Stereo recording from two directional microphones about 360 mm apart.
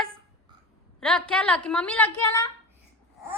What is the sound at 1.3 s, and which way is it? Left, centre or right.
A woman's voice, centre.